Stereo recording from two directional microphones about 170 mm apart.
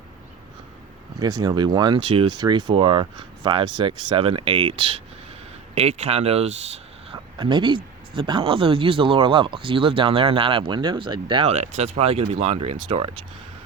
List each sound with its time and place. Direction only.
1.2 s speech: 25° right (ahead or behind)
11.5 s speech: 40° right (ahead or behind)